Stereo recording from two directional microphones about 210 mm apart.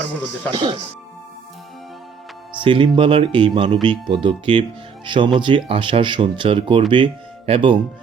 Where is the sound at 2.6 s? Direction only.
25° right (ahead or behind).